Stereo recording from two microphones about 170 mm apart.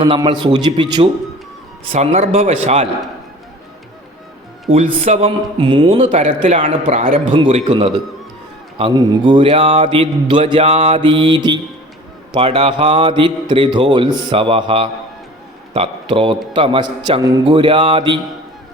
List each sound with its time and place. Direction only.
0.0 s a man's voice: 25° right (ahead or behind)
1.9 s a man's voice: 40° right (ahead or behind)
4.7 s a man's voice: 35° right (ahead or behind); by 7.2 s 50° right (ahead or behind)
7.3 s a man's voice: 30° right (ahead or behind)